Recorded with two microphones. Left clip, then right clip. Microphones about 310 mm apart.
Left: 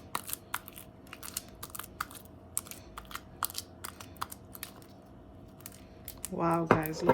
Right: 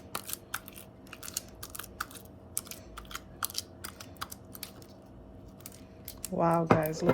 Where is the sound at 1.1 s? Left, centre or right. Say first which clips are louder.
Right 2 dB; centre.